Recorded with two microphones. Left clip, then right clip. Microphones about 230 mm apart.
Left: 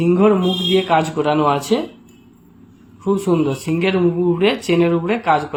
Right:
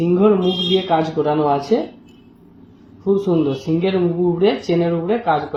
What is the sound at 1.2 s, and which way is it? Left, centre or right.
Speech, left.